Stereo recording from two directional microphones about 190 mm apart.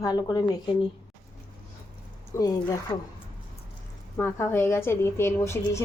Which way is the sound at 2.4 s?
20° left (ahead or behind).